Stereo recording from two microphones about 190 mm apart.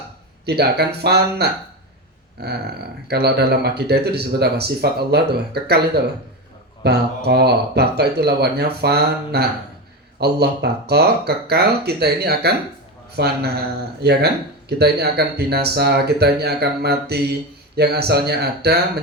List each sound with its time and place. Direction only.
0.4 s speech: 60° right (ahead or behind)
6.8 s speech: 60° right (ahead or behind)